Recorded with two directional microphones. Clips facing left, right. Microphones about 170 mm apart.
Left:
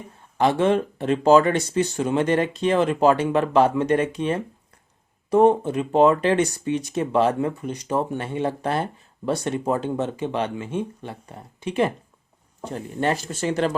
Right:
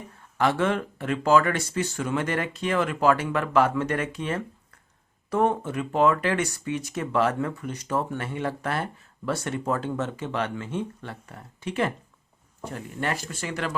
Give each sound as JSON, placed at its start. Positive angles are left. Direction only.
{"t": 0.2, "sound": "speech", "side_deg": 20}